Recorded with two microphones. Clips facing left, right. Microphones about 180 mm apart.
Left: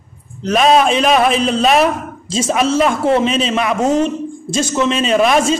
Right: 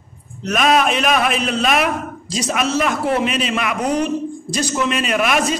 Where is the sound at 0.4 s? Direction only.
30° left (ahead or behind).